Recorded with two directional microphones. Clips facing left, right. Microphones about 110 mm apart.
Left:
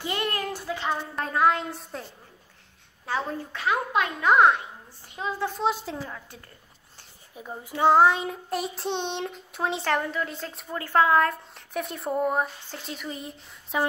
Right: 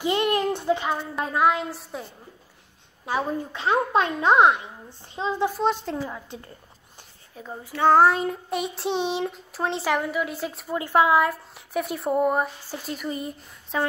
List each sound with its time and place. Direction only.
0.0 s a sound: 20° right (ahead or behind)
0.8 s a woman's voice: 10° right (ahead or behind)
1.5 s speech: centre (ahead or behind)
3.1 s a woman's voice: 15° right (ahead or behind)
3.6 s a child's voice: 30° right (ahead or behind)
5.5 s speech: centre (ahead or behind)
5.9 s a woman's voice: 15° right (ahead or behind)
7.3 s a child's voice: 15° left (ahead or behind)
7.9 s a woman's voice: centre (ahead or behind)